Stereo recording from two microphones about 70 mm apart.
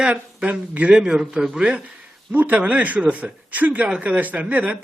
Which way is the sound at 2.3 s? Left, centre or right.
Right.